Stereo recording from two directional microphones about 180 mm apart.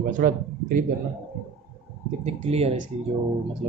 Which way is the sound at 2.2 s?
35° right (ahead or behind).